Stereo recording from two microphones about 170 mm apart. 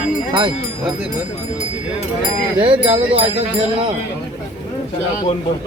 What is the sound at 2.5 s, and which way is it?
Speech, 30° right (ahead or behind).